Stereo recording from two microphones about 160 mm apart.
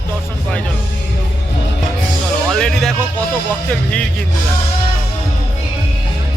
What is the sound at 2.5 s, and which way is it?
Music, 5° left (ahead or behind).